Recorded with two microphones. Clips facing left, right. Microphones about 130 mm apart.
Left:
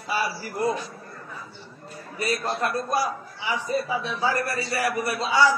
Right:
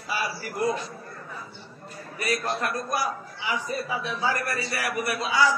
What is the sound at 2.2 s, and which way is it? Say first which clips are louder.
A man's voice: left 2 dB; 30° left (ahead or behind).